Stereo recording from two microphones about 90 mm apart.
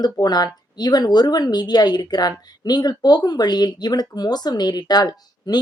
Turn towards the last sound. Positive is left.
turn(degrees=50)  # may be behind; listen again after turning